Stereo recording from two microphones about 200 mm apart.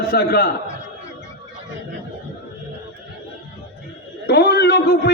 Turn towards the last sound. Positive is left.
turn(degrees=55)  # may be behind; listen again after turning